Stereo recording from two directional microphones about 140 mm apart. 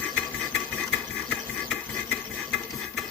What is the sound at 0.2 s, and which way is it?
Engine, 5° left (ahead or behind).